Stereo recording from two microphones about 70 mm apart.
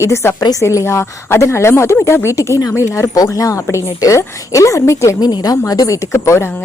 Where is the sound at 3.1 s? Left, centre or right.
Left.